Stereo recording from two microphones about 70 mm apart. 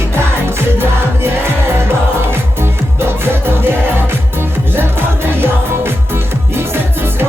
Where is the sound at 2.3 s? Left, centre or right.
Right.